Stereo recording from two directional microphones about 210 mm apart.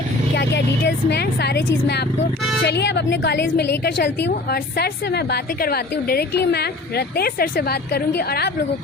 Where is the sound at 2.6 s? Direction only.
55° left (ahead or behind).